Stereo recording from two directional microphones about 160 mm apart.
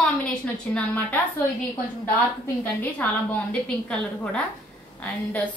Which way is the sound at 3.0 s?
10° left (ahead or behind).